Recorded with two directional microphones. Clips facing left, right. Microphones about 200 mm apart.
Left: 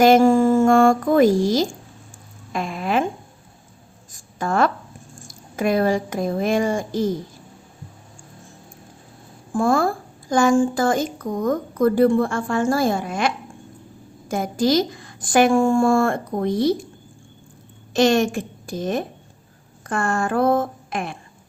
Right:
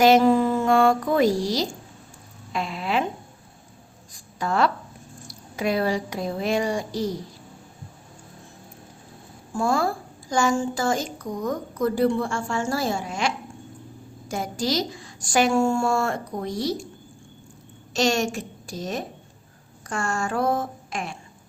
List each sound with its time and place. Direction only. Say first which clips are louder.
0.0 s a woman's voice: left 3 dB; 50° left (ahead or behind)
4.1 s a sound: left 3 dB; 50° left (ahead or behind)
5.3 s a woman's voice: left 4 dB; 50° left (ahead or behind)
9.5 s a woman's voice: left 4 dB; 50° left (ahead or behind)
17.9 s speech: left 6 dB; 55° left (ahead or behind)